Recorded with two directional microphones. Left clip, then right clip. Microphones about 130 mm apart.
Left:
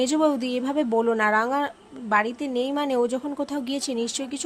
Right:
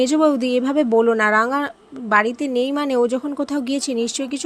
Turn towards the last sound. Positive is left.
turn(degrees=-30)  # may be behind; listen again after turning